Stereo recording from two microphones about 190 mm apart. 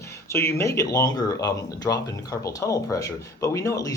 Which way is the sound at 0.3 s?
15° left (ahead or behind).